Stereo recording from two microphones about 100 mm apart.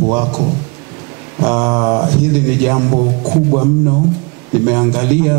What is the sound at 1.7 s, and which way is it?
Speech, 25° right (ahead or behind).